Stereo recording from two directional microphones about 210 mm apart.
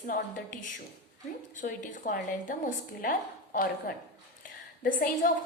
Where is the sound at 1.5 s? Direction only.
40° left (ahead or behind).